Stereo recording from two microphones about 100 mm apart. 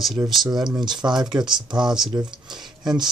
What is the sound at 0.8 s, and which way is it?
Speech, 45° right (ahead or behind).